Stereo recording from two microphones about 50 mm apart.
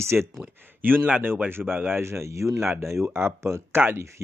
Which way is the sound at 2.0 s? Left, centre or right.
Right.